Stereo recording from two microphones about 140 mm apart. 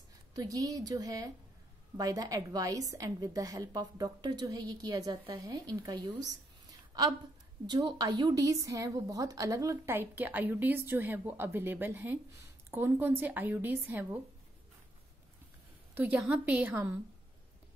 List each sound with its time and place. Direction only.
0.3 s a woman's voice: 25° right (ahead or behind)
6.9 s a sound: 25° right (ahead or behind)
7.6 s a woman's voice: 30° right (ahead or behind); by 14.2 s 15° right (ahead or behind)
16.0 s a woman's voice: 10° right (ahead or behind)